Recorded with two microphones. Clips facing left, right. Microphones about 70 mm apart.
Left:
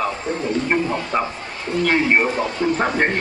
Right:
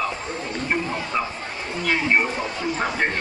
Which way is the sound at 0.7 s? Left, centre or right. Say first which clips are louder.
Left 1 dB; left.